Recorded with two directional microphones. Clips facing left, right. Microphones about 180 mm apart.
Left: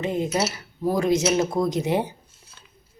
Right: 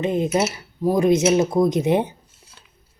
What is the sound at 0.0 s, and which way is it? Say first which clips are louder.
Speech: right 4 dB; 20° right (ahead or behind).